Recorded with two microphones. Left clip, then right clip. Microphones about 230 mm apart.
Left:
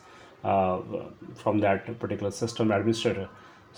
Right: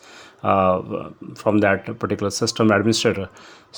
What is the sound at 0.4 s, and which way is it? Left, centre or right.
Speech, right.